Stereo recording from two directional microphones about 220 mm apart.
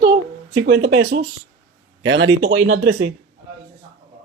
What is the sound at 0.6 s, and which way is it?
Speech, 45° right (ahead or behind).